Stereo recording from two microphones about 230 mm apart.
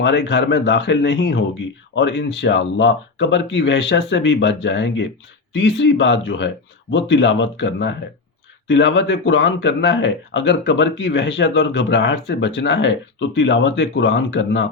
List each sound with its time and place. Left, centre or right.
0.0 s speech: left